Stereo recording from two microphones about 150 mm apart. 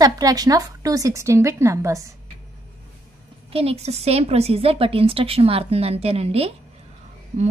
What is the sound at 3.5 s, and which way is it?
A woman's voice, 40° right (ahead or behind).